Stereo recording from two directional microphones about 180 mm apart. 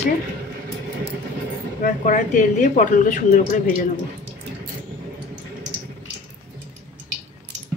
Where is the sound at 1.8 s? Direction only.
45° left (ahead or behind).